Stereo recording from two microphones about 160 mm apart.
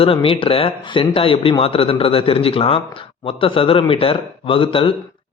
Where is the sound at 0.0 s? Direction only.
35° left (ahead or behind).